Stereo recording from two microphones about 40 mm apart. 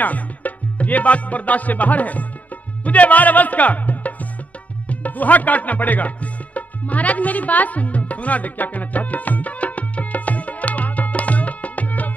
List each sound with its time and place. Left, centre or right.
0.0 s music: left